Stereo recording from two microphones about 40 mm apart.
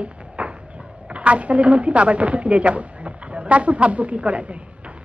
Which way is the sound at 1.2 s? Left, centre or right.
Right.